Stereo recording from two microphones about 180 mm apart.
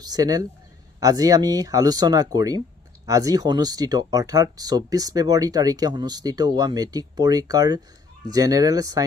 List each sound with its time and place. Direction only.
0.0 s speech: 20° right (ahead or behind)